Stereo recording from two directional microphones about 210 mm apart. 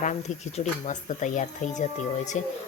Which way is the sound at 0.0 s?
35° left (ahead or behind).